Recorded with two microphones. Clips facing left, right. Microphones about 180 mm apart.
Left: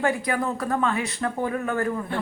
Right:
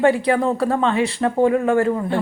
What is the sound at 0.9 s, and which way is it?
Speech, 90° right.